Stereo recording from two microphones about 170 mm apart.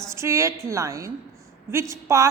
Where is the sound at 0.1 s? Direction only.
15° right (ahead or behind).